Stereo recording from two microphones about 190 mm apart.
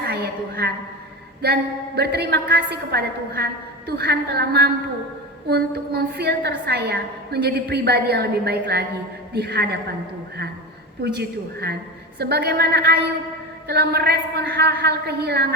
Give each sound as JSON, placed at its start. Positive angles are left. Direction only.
{"t": 0.0, "sound": "a woman's voice", "side_deg": -55}
{"t": 2.0, "sound": "a woman's voice", "side_deg": -60}
{"t": 11.0, "sound": "a woman's voice", "side_deg": -60}